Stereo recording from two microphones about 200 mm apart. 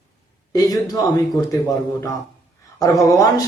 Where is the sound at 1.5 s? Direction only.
15° left (ahead or behind).